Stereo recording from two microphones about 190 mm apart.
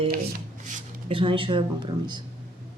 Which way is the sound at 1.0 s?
25° right (ahead or behind).